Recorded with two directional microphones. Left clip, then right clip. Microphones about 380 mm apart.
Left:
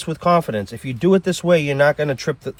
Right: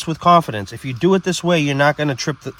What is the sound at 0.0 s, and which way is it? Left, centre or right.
Speech, right.